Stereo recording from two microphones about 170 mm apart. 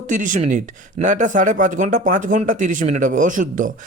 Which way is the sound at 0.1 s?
50° right (ahead or behind).